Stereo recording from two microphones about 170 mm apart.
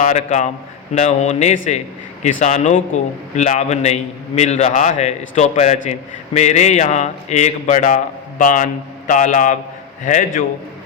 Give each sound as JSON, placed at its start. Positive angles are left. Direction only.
{"t": 0.0, "sound": "a man's voice", "side_deg": 45}